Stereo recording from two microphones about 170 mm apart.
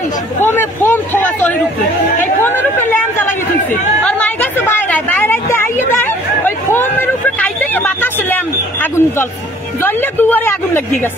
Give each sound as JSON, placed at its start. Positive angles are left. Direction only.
{"t": 0.4, "sound": "speech", "side_deg": 15}
{"t": 2.4, "sound": "chatter", "side_deg": 10}
{"t": 4.0, "sound": "a sound", "side_deg": 10}
{"t": 9.8, "sound": "a woman's voice", "side_deg": 15}